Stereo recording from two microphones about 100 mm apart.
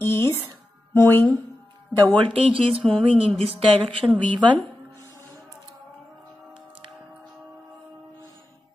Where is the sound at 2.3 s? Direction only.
65° right (ahead or behind).